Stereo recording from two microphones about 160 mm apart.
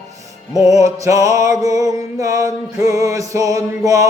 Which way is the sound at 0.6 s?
20° right (ahead or behind).